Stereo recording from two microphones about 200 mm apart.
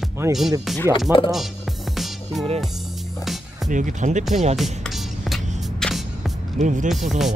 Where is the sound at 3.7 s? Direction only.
40° right (ahead or behind).